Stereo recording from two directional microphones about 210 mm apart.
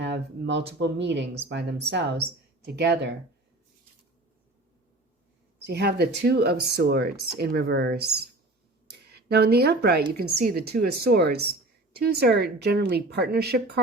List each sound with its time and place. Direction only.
0.0 s speech: 55° right (ahead or behind)
5.6 s speech: 50° right (ahead or behind)